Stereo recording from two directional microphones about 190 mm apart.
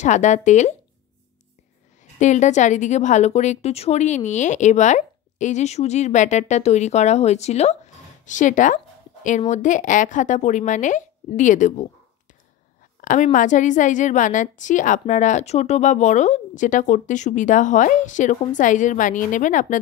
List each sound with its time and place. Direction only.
0.0 s speech: 40° left (ahead or behind)
2.1 s speech: 40° left (ahead or behind)
13.0 s speech: 45° left (ahead or behind)